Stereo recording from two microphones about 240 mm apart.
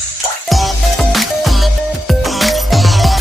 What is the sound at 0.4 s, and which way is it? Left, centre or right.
Music, centre.